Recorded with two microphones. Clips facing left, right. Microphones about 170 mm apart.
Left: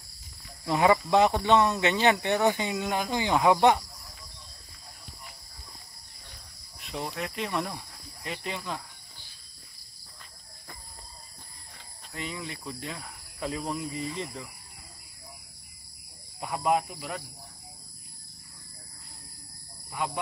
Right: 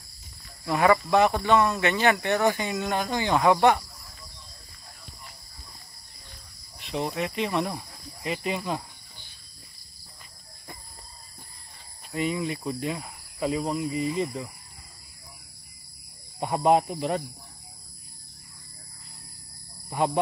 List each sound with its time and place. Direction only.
0.7 s speech: 20° left (ahead or behind)
7.2 s speech: centre (ahead or behind)
12.1 s speech: 15° right (ahead or behind)
16.3 s speech: 30° right (ahead or behind)